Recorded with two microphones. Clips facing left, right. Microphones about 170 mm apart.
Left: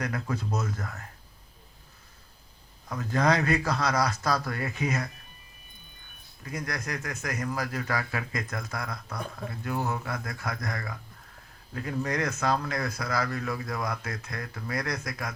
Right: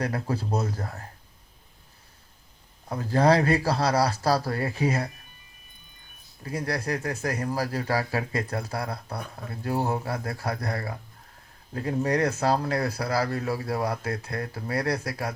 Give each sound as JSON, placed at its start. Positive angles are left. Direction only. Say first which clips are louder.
{"t": 0.0, "sound": "speech", "louder": "right 3 dB", "side_deg": -30}
{"t": 2.9, "sound": "speech", "louder": "right 4 dB", "side_deg": -30}
{"t": 6.4, "sound": "speech", "louder": "right 5 dB", "side_deg": -30}